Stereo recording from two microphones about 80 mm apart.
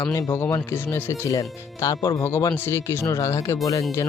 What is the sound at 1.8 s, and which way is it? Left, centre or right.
Speech, left.